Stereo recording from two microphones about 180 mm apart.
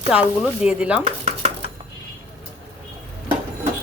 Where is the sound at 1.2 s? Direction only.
35° right (ahead or behind).